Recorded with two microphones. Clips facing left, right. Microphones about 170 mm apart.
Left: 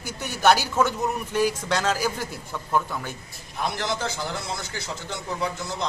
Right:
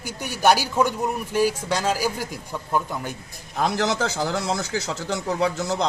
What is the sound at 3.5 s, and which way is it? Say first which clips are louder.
A man's voice: right 5 dB; 90° right.